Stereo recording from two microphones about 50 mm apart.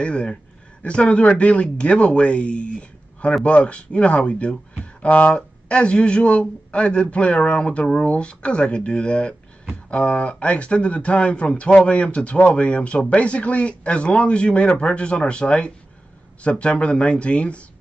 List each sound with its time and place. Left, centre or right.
0.0 s speech: left
5.0 s speech: left
5.7 s speech: left